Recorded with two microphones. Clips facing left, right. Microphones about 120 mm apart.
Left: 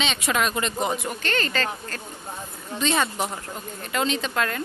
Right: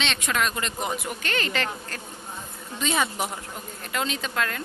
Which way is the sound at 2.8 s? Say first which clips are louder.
Left 2 dB; 5° right (ahead or behind).